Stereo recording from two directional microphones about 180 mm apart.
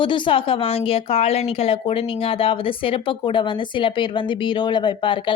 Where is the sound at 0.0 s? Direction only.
30° left (ahead or behind).